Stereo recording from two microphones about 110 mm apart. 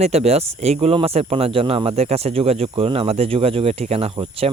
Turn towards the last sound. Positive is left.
turn(degrees=-65)  # may be behind; listen again after turning